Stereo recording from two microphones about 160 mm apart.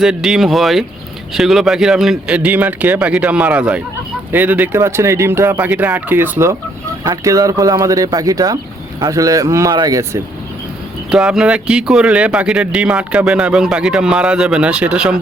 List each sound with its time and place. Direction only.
0.0 s speech: 5° right (ahead or behind); by 10.2 s 20° right (ahead or behind)
11.1 s speech: 5° right (ahead or behind)